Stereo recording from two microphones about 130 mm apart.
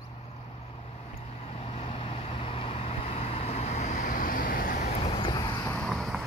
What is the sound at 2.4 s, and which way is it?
Vehicle, 50° left (ahead or behind).